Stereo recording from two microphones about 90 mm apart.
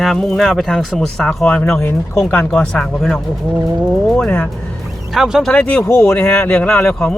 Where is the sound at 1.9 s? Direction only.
25° left (ahead or behind).